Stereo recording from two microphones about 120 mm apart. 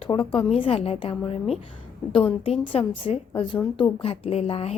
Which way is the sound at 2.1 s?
50° left (ahead or behind).